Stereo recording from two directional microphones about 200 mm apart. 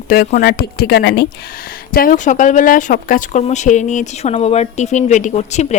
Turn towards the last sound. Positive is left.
turn(degrees=35)  # may be behind; listen again after turning